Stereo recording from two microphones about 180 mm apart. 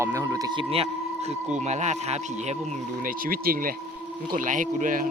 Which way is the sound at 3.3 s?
55° right (ahead or behind).